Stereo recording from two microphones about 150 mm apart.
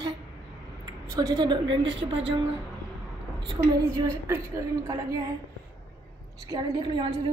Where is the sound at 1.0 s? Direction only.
25° right (ahead or behind).